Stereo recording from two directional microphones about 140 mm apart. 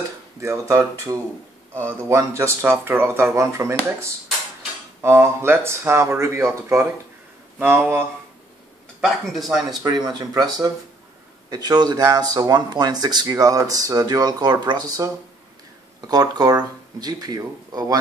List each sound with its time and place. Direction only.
0.4 s speech: 20° right (ahead or behind)
9.0 s speech: centre (ahead or behind)
9.5 s speech: 30° right (ahead or behind)